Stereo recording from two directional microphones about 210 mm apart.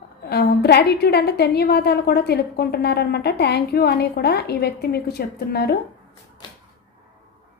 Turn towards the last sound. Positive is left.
turn(degrees=50)  # may be behind; listen again after turning